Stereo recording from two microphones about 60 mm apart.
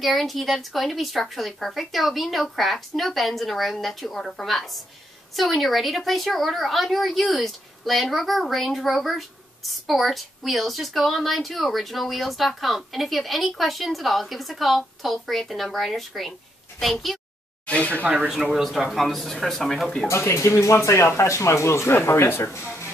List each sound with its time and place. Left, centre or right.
0.0 s a woman's voice: centre
17.6 s speech: left
18.0 s speech: right
18.5 s a woman's voice: centre
20.1 s speech: left